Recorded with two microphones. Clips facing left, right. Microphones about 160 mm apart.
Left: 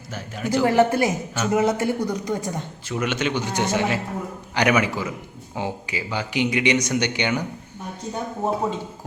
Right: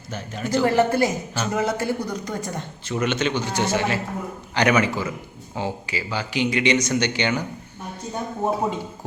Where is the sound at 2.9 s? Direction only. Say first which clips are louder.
Right 1 dB; 10° left (ahead or behind).